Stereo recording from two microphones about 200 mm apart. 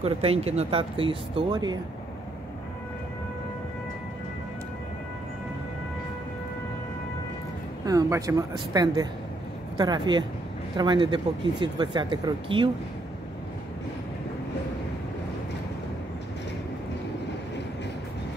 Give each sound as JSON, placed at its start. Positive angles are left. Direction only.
{"t": 0.0, "sound": "speech", "side_deg": -30}
{"t": 7.8, "sound": "speech", "side_deg": -15}